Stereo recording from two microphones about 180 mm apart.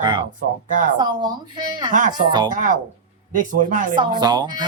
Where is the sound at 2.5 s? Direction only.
50° right (ahead or behind).